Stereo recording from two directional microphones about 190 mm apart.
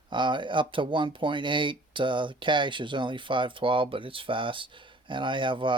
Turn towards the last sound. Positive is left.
turn(degrees=-25)  # may be behind; listen again after turning